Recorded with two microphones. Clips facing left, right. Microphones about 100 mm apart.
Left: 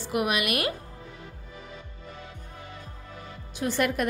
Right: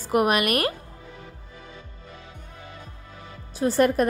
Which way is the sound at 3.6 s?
35° right (ahead or behind).